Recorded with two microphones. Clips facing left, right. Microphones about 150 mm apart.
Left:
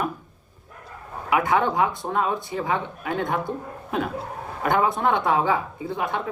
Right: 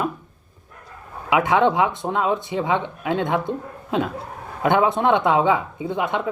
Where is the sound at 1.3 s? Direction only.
25° right (ahead or behind).